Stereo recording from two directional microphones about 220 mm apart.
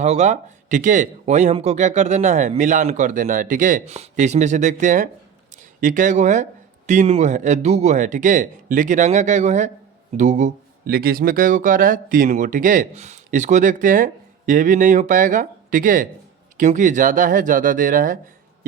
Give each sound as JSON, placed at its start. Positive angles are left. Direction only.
{"t": 0.0, "sound": "speech", "side_deg": -30}